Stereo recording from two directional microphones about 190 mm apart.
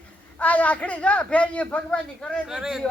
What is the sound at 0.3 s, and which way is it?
A woman's voice, 5° left (ahead or behind).